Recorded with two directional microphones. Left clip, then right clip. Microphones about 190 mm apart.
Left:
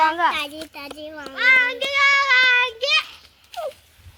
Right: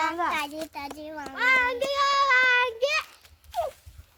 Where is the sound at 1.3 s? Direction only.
30° right (ahead or behind).